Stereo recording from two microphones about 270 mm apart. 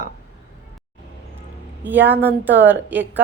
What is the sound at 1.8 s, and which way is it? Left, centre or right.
Speech, centre.